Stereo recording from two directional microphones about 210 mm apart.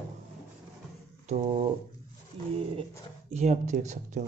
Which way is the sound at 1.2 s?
30° right (ahead or behind).